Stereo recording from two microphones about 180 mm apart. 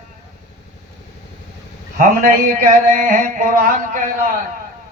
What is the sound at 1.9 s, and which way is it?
A man's voice, 50° right (ahead or behind).